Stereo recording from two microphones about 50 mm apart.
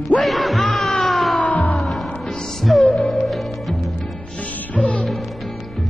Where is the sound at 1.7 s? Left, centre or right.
Centre.